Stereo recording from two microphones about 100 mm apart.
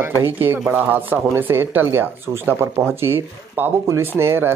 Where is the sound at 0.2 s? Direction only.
20° right (ahead or behind).